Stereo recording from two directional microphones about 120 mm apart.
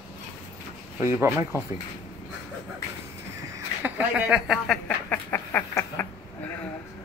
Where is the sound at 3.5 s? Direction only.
15° right (ahead or behind).